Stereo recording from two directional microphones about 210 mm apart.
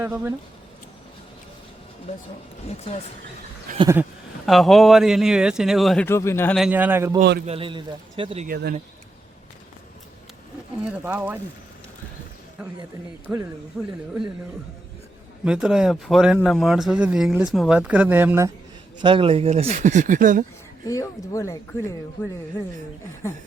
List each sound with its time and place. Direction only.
0.0 s speech: 10° right (ahead or behind)
2.6 s speech: 30° left (ahead or behind)
3.8 s speech: 15° right (ahead or behind)
4.4 s speech: centre (ahead or behind)
6.6 s speech: 10° right (ahead or behind)
7.2 s a man's voice: 45° right (ahead or behind)
7.4 s speech: 25° right (ahead or behind)
8.4 s a man's voice: 50° right (ahead or behind)
10.8 s speech: 5° right (ahead or behind)
13.7 s speech: 10° right (ahead or behind)
15.4 s speech: 5° right (ahead or behind)
19.0 s speech: 25° right (ahead or behind)
20.8 s speech: 15° left (ahead or behind)